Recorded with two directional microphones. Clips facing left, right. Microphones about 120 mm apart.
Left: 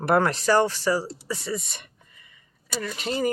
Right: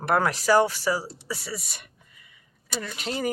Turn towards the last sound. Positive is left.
turn(degrees=0)  # may be behind; listen again after turning